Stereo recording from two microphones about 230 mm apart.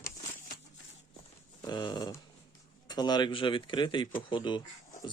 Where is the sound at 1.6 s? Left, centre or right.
Centre.